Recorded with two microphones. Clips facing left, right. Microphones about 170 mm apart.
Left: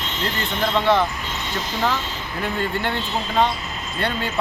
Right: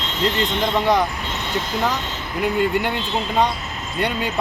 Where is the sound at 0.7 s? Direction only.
15° right (ahead or behind).